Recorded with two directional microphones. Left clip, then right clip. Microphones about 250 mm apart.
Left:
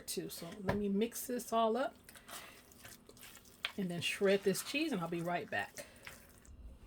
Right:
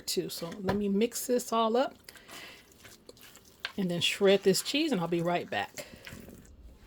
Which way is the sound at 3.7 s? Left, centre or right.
Right.